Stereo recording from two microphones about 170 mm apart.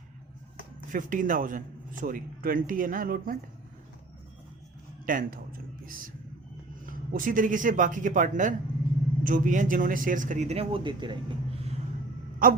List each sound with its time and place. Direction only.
0.9 s speech: 50° right (ahead or behind)
5.0 s speech: 55° right (ahead or behind)
7.1 s speech: 55° right (ahead or behind); by 11.8 s 35° right (ahead or behind)
12.4 s wail: 55° right (ahead or behind)